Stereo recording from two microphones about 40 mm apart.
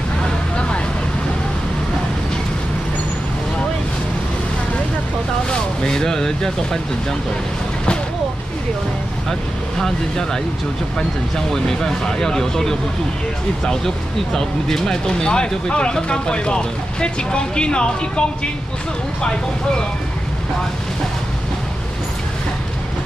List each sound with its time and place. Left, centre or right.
5.5 s speech: centre
9.3 s speech: centre